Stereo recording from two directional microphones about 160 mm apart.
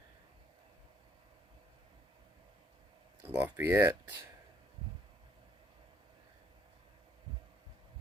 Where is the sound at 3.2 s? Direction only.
10° right (ahead or behind).